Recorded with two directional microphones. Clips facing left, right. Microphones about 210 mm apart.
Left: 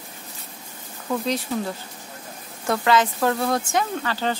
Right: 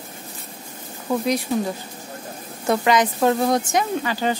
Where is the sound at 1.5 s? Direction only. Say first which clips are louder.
Right 4 dB; 10° right (ahead or behind).